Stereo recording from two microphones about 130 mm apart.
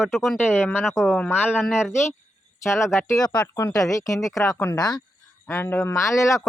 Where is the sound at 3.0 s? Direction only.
30° left (ahead or behind).